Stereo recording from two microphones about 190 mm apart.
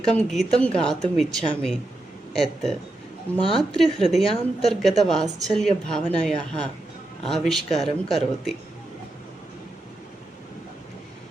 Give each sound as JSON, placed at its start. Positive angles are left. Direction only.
{"t": 0.0, "sound": "a woman's voice", "side_deg": 5}